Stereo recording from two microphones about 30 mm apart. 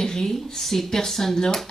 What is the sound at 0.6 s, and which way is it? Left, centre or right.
A woman's voice, centre.